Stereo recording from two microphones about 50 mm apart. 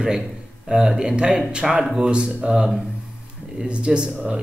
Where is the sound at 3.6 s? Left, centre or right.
Right.